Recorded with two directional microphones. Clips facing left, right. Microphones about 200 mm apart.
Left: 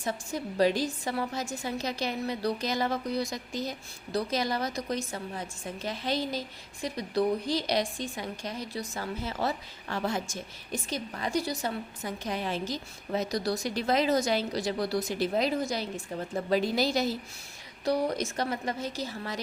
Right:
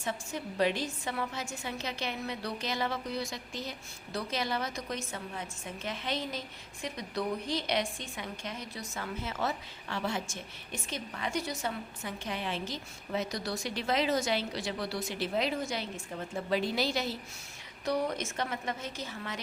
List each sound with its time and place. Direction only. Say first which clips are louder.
0.0 s a woman's voice: left 3 dB; 40° left (ahead or behind)